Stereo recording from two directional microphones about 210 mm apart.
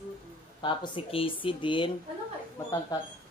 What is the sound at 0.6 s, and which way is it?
Speech, 25° left (ahead or behind).